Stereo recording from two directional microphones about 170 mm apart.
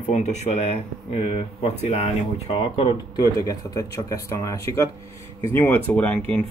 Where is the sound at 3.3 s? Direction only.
20° left (ahead or behind).